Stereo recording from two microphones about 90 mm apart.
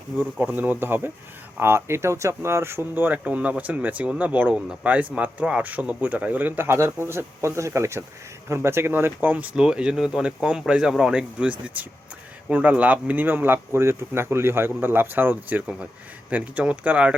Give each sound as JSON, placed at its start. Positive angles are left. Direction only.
{"t": 0.2, "sound": "speech", "side_deg": -20}